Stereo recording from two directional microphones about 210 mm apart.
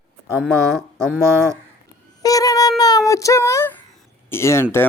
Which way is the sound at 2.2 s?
15° left (ahead or behind).